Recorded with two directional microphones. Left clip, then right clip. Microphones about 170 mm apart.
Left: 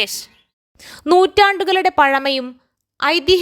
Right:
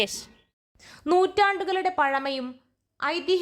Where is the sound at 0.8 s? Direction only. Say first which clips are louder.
Left 9 dB; 45° left (ahead or behind).